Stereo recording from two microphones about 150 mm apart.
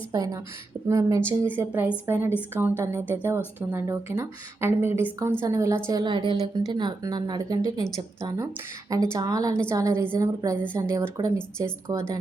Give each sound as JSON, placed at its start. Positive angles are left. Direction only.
{"t": 0.1, "sound": "speech", "side_deg": -25}
{"t": 5.9, "sound": "a woman's voice", "side_deg": -30}
{"t": 9.1, "sound": "speech", "side_deg": -25}